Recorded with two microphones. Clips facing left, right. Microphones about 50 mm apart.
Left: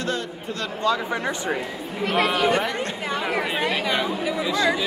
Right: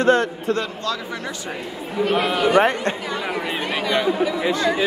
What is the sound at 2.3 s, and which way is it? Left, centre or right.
Speech, right.